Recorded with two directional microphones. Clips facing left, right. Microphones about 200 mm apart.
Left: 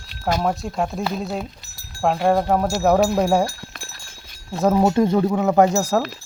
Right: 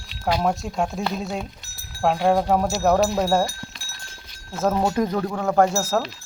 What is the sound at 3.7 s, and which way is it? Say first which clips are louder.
Clip-clop: left 6 dB; 55° left (ahead or behind).